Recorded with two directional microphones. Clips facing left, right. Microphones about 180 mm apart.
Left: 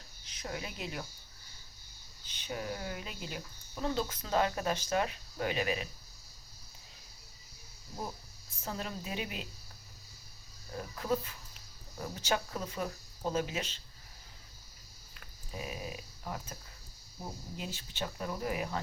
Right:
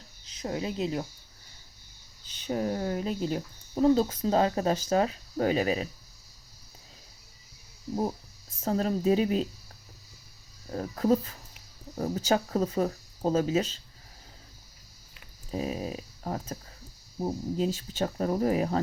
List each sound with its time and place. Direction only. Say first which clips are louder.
0.4 s speech: right 10 dB; 30° right (ahead or behind)
2.5 s speech: right 9 dB; 35° right (ahead or behind)
8.6 s speech: right 14 dB; 40° right (ahead or behind)
10.7 s speech: right 9 dB; 40° right (ahead or behind)
15.5 s speech: right 9 dB; 35° right (ahead or behind)